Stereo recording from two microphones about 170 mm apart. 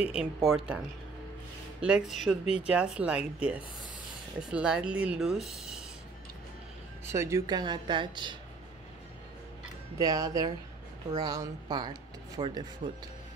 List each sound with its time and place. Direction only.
0.0 s speech: 5° right (ahead or behind)
1.8 s speech: 5° right (ahead or behind)
7.1 s speech: 15° right (ahead or behind)
9.9 s speech: 20° right (ahead or behind)